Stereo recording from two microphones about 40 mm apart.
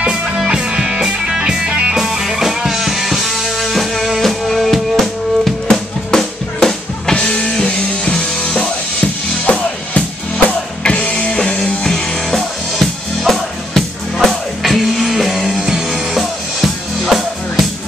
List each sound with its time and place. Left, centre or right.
0.5 s music: centre
2.0 s music: centre; by 11.2 s left
11.2 s music: left
11.6 s music: centre
15.6 s music: centre
16.2 s music: centre